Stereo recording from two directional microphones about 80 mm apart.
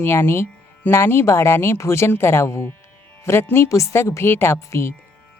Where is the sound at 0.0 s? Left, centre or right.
Left.